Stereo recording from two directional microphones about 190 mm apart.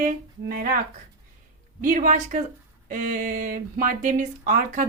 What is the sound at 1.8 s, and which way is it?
Speech, 45° right (ahead or behind).